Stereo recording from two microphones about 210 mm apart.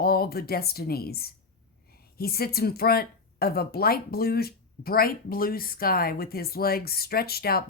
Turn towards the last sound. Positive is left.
turn(degrees=45)  # may be behind; listen again after turning